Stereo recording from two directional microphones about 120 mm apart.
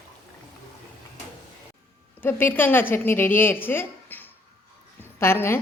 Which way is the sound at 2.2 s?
15° left (ahead or behind).